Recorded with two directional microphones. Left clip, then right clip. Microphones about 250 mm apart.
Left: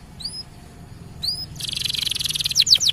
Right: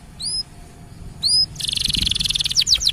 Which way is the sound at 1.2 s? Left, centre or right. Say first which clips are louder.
Right 9 dB; centre.